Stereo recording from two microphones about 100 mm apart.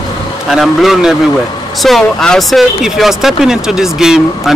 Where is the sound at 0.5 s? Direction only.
Centre (ahead or behind).